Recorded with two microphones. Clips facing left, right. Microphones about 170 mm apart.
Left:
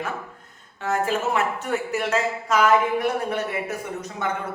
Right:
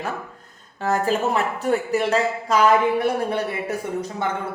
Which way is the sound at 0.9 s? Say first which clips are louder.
Right 2 dB; 35° right (ahead or behind).